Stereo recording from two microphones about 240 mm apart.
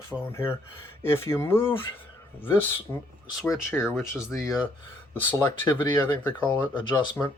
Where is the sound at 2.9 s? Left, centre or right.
Centre.